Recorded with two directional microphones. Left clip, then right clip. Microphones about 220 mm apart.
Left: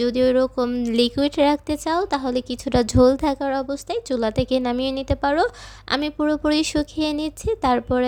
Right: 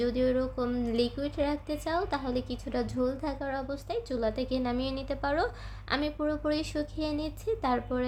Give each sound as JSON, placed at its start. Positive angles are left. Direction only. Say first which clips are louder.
{"t": 0.0, "sound": "speech", "louder": "left 10 dB", "side_deg": 40}